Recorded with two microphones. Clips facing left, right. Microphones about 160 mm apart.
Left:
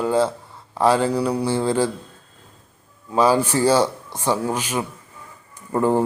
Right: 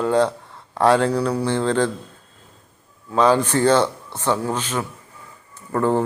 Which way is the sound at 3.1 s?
10° left (ahead or behind).